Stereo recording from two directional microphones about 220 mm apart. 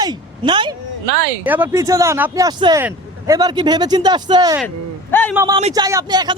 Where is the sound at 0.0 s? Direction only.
20° right (ahead or behind).